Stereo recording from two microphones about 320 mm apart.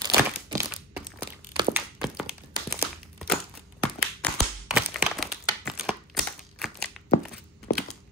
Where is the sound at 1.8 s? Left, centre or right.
Centre.